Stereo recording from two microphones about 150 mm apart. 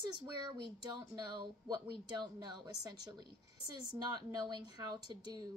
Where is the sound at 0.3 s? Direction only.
30° right (ahead or behind).